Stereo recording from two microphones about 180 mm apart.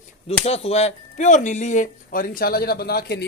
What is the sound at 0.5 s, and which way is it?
Speech, 35° left (ahead or behind).